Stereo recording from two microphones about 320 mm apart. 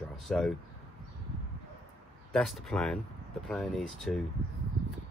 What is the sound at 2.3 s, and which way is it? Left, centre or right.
Speech, centre.